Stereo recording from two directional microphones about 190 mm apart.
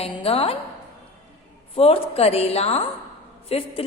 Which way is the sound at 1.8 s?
30° left (ahead or behind).